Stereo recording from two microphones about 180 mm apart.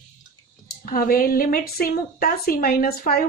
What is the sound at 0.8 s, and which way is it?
A woman's voice, 50° left (ahead or behind).